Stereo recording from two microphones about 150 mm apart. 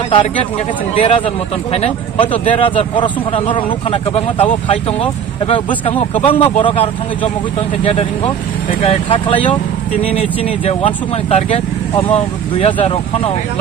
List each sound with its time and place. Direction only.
0.9 s speech: 40° left (ahead or behind)
8.8 s speech: 35° left (ahead or behind)